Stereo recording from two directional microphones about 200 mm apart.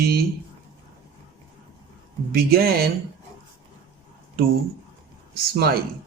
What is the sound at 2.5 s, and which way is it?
Speech, 50° right (ahead or behind).